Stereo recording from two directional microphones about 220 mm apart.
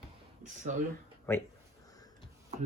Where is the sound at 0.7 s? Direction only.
35° right (ahead or behind).